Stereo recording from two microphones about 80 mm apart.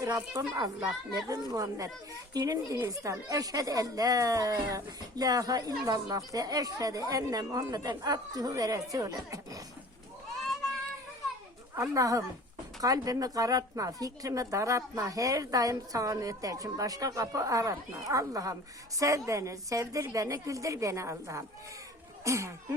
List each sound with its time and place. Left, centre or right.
0.3 s a woman's voice: right
2.7 s a woman's voice: right
11.8 s a woman's voice: right